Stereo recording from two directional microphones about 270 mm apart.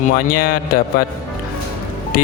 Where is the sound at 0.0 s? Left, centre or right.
Left.